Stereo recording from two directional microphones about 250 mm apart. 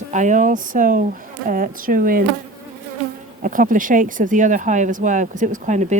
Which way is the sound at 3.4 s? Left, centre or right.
Right.